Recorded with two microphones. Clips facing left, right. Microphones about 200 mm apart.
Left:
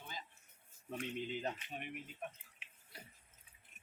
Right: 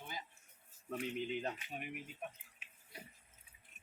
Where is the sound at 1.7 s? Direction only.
5° right (ahead or behind).